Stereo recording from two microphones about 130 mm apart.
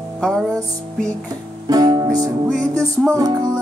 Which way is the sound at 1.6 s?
30° right (ahead or behind).